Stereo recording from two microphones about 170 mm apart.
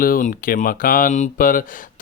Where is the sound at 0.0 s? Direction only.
55° left (ahead or behind).